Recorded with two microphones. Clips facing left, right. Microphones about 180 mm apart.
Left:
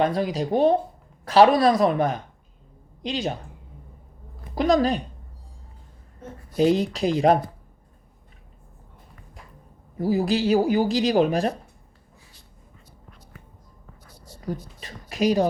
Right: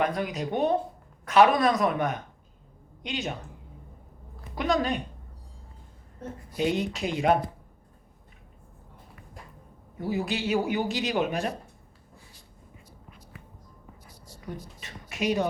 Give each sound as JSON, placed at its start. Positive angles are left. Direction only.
{"t": 0.0, "sound": "speech", "side_deg": 30}
{"t": 4.5, "sound": "speech", "side_deg": 35}
{"t": 6.6, "sound": "speech", "side_deg": 35}
{"t": 10.0, "sound": "speech", "side_deg": 35}
{"t": 14.4, "sound": "speech", "side_deg": 35}